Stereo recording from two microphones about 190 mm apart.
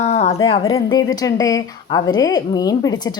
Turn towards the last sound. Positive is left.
turn(degrees=20)  # may be behind; listen again after turning